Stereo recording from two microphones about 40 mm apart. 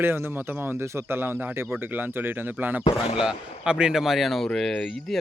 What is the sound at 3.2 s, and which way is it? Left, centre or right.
Speech, centre.